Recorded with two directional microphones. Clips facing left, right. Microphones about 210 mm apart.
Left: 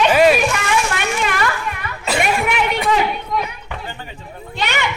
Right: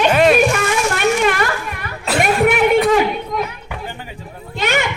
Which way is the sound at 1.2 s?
45° right (ahead or behind).